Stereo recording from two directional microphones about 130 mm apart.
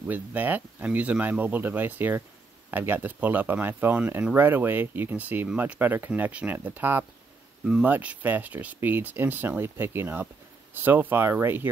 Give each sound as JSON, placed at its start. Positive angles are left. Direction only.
{"t": 0.0, "sound": "speech", "side_deg": -15}